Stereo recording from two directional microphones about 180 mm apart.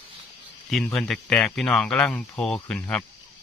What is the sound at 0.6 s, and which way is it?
Speech, centre (ahead or behind).